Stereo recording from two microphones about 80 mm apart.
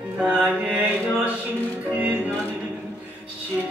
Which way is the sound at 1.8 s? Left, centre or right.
Centre.